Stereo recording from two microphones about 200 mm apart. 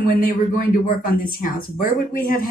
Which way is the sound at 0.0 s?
45° left (ahead or behind).